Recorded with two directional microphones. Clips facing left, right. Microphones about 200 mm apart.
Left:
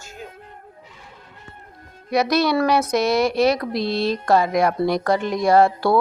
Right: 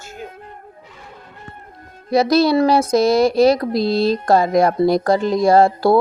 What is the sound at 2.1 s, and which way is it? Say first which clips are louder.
A woman's voice: right 5 dB; 30° right (ahead or behind).